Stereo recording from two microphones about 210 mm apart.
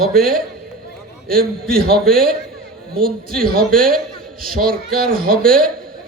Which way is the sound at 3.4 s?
45° right (ahead or behind).